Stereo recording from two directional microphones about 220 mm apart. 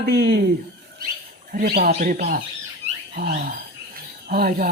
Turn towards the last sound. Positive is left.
turn(degrees=-45)  # may be behind; listen again after turning